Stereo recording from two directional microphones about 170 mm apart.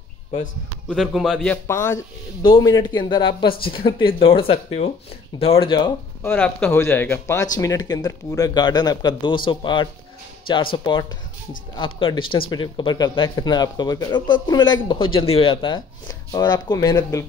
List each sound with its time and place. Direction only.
0.8 s a man's voice: centre (ahead or behind)
1.7 s speech: 15° left (ahead or behind)
6.2 s speech: 10° left (ahead or behind); by 10.7 s 30° left (ahead or behind)
11.7 s speech: 30° left (ahead or behind)